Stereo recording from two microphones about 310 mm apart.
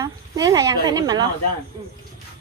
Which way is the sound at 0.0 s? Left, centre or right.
Centre.